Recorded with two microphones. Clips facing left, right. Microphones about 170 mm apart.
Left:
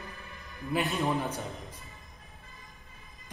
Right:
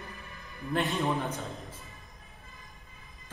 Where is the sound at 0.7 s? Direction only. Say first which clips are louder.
Even; centre (ahead or behind).